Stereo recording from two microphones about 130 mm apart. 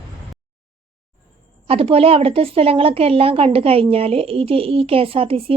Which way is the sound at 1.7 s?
45° right (ahead or behind).